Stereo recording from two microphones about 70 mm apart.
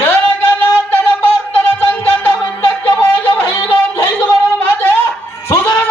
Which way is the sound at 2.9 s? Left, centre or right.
Left.